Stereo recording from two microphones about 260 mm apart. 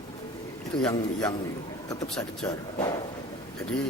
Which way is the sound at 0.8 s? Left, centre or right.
Centre.